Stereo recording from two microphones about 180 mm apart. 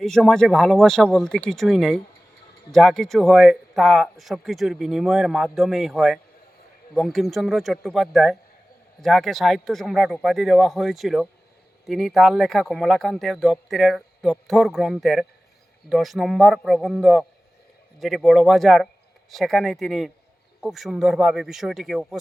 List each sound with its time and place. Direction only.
0.0 s speech: centre (ahead or behind)